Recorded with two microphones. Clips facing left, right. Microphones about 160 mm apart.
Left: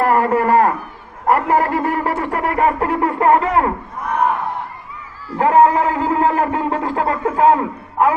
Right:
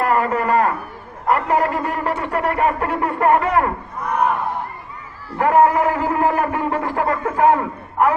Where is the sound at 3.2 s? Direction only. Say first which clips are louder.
Left 1 dB; 30° left (ahead or behind).